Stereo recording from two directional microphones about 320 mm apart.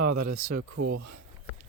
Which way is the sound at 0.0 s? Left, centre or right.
Right.